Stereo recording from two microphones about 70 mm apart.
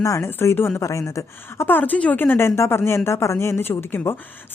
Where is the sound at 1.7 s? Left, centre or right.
Left.